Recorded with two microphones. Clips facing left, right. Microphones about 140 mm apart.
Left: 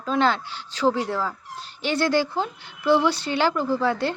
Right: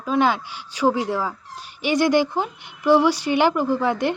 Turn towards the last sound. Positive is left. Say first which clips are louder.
# right 2 dB
turn(degrees=-15)  # may be behind; listen again after turning